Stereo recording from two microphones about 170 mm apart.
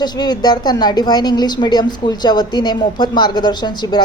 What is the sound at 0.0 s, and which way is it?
A woman's voice, 25° left (ahead or behind).